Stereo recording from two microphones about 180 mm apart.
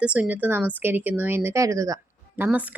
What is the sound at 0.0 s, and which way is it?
A woman's voice, 5° right (ahead or behind).